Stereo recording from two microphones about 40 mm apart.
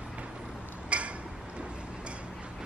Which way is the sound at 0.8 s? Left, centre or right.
Right.